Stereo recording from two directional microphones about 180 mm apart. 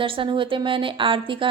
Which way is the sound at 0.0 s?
30° right (ahead or behind).